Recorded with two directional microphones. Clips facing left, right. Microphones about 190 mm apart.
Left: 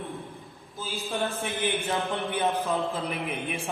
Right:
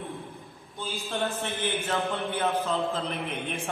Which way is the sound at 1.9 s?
15° left (ahead or behind).